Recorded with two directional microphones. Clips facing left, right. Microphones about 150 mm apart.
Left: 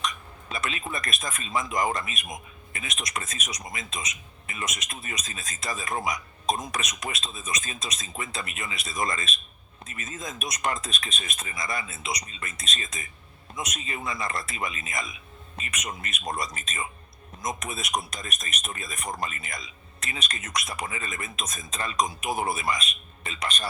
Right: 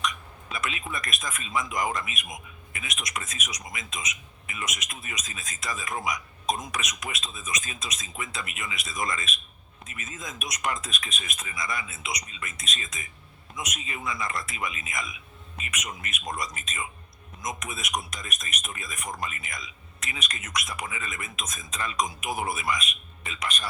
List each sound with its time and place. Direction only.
0.0 s speech: 35° left (ahead or behind)